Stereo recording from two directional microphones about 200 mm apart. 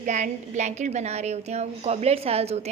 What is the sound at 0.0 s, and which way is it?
A woman's voice, 35° right (ahead or behind).